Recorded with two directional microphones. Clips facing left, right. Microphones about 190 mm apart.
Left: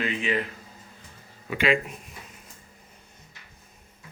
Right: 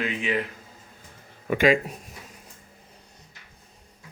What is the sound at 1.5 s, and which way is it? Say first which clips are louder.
Speech: right 4 dB; 45° right (ahead or behind).